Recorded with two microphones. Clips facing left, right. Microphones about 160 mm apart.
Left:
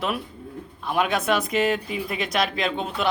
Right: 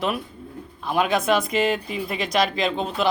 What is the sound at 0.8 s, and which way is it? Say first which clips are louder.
Speech: right 2 dB; centre (ahead or behind).